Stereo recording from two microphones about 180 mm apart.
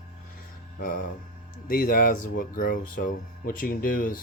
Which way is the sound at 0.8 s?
50° left (ahead or behind).